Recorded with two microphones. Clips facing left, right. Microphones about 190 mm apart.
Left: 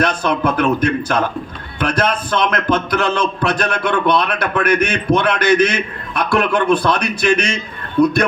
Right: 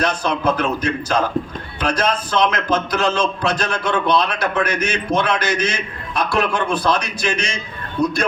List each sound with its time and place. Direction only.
0.0 s a man's voice: 60° left (ahead or behind)